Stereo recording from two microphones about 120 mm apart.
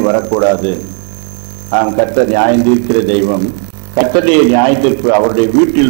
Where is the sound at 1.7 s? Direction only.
20° right (ahead or behind).